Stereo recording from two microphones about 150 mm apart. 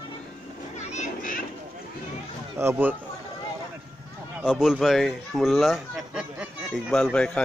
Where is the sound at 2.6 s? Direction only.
15° right (ahead or behind).